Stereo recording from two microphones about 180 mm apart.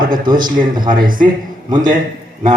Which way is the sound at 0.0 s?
50° right (ahead or behind).